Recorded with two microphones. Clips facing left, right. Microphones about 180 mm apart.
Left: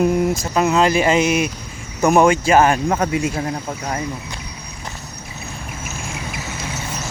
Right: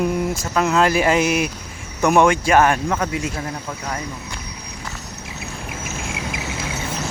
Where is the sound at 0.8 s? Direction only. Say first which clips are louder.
Even; centre (ahead or behind).